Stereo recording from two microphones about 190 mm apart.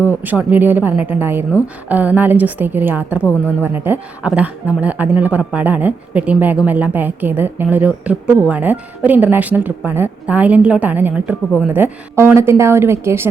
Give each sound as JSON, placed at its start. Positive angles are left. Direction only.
{"t": 0.2, "sound": "a woman's voice", "side_deg": -10}